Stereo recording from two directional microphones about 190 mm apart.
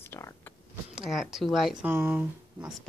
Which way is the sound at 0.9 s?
Centre (ahead or behind).